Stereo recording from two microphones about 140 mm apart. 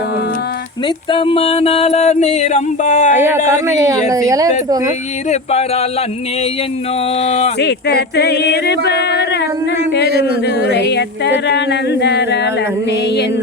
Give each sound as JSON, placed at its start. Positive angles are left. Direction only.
{"t": 1.1, "sound": "mantra", "side_deg": 40}
{"t": 3.2, "sound": "speech", "side_deg": -15}
{"t": 5.3, "sound": "mantra", "side_deg": 50}
{"t": 7.2, "sound": "mantra", "side_deg": 50}